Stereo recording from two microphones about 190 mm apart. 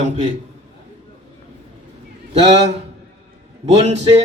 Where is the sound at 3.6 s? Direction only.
35° right (ahead or behind).